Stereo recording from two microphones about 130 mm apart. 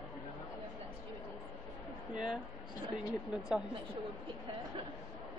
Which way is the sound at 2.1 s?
5° right (ahead or behind).